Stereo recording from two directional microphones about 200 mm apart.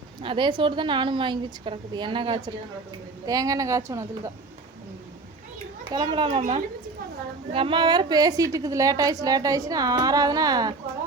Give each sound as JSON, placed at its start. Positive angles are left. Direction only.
{"t": 0.2, "sound": "a woman's voice", "side_deg": -25}
{"t": 5.9, "sound": "a woman's voice", "side_deg": -20}
{"t": 7.5, "sound": "a woman's voice", "side_deg": -25}